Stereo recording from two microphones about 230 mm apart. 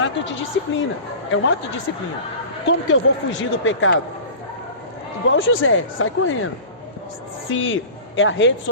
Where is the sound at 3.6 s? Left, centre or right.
Left.